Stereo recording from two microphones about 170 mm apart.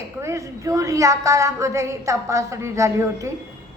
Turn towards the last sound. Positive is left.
turn(degrees=-20)  # may be behind; listen again after turning